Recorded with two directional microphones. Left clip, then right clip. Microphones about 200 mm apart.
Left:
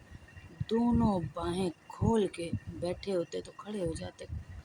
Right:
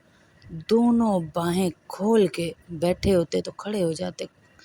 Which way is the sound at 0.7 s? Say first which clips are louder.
Right 9 dB; 30° right (ahead or behind).